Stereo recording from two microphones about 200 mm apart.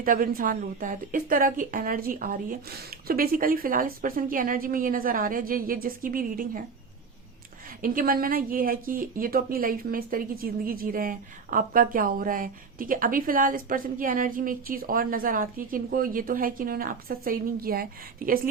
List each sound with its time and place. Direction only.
0.0 s speech: 45° right (ahead or behind)
7.8 s speech: 45° right (ahead or behind)